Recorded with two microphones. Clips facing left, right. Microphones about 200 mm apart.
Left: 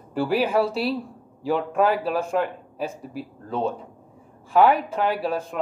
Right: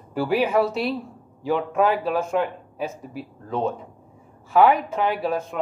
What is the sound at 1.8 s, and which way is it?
Speech, 35° left (ahead or behind).